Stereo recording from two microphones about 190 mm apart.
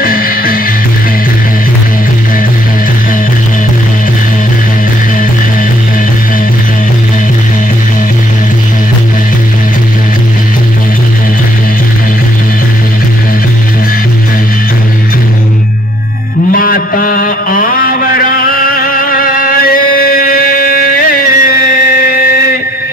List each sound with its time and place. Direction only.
0.0 s music: 50° left (ahead or behind)
16.5 s mantra: 50° left (ahead or behind)